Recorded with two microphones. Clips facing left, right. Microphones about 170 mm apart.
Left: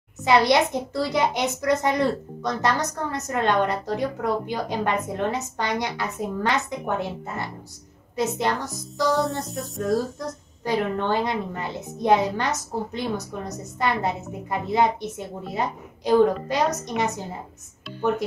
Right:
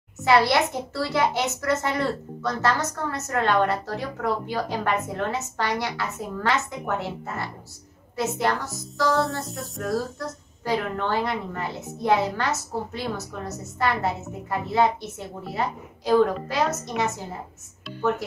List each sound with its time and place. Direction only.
0.2 s speech: 20° left (ahead or behind)
9.3 s music: centre (ahead or behind)
9.8 s a woman's voice: 20° left (ahead or behind)